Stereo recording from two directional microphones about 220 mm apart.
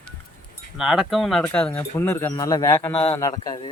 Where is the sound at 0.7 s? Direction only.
Centre (ahead or behind).